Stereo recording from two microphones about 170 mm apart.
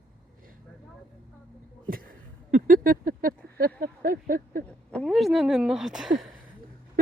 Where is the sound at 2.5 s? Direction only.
55° right (ahead or behind).